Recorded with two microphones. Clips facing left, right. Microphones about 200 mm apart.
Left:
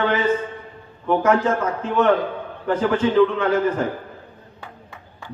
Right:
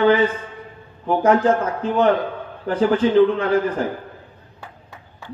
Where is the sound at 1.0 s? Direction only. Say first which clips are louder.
Right 2 dB; 35° right (ahead or behind).